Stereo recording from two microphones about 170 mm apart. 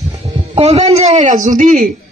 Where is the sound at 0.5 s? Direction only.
35° right (ahead or behind).